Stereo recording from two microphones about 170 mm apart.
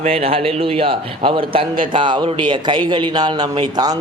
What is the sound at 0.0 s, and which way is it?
A man's voice, 35° right (ahead or behind).